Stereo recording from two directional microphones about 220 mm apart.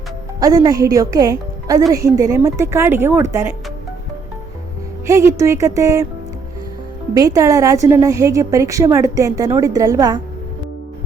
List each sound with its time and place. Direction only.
0.3 s a woman's voice: 15° right (ahead or behind)
5.0 s a woman's voice: 15° right (ahead or behind)
7.1 s a woman's voice: 15° right (ahead or behind)